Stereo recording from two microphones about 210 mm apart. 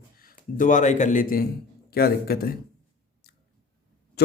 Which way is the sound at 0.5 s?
40° left (ahead or behind).